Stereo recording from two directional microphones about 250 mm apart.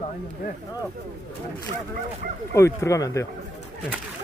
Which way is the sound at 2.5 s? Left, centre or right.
Centre.